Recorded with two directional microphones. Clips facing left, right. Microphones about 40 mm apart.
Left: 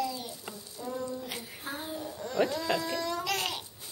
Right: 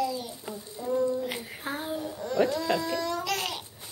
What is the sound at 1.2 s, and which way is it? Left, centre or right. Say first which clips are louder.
Child singing: right 6 dB; right.